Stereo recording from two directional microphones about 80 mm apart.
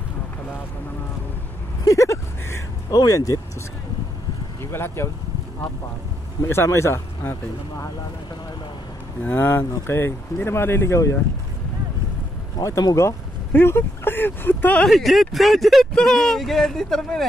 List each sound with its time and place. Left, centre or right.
1.9 s vehicle: left
4.6 s speech: left
6.4 s speech: left
9.2 s speech: left
12.5 s speech: left
13.5 s speech: left
14.9 s speech: centre